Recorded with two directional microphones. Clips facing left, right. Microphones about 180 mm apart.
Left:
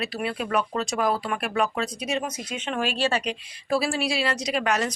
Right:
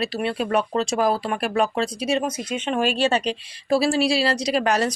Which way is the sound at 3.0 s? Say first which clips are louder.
Right 4 dB; 30° right (ahead or behind).